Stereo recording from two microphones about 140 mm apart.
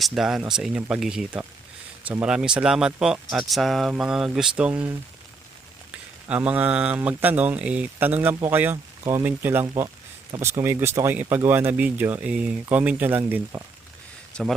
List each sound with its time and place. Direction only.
0.0 s speech: centre (ahead or behind)
6.2 s speech: 10° right (ahead or behind)
14.3 s speech: 5° left (ahead or behind)